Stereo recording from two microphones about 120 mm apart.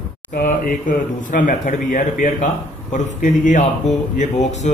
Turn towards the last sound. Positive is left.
turn(degrees=85)